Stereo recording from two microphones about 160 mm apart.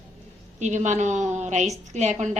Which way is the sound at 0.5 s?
45° right (ahead or behind).